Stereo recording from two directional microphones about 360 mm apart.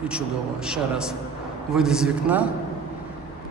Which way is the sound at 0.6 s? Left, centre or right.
Centre.